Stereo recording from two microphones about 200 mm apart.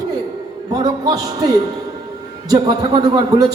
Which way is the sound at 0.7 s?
20° right (ahead or behind).